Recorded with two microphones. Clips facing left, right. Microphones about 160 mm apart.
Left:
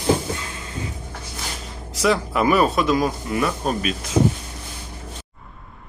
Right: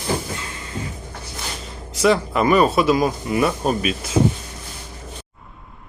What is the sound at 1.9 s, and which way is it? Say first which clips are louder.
Speech: right 3 dB; centre (ahead or behind).